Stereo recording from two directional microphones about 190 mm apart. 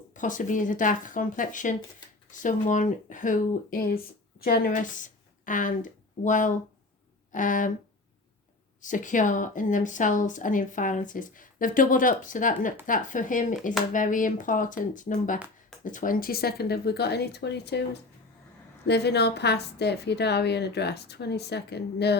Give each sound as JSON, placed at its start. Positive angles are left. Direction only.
{"t": 0.1, "sound": "a woman's voice", "side_deg": 40}
{"t": 8.8, "sound": "a woman's voice", "side_deg": 40}
{"t": 18.9, "sound": "a woman's voice", "side_deg": 60}